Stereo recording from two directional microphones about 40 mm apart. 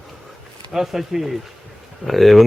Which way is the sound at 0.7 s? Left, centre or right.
Centre.